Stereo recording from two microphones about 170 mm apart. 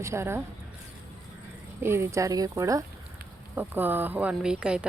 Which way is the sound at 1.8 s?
15° right (ahead or behind).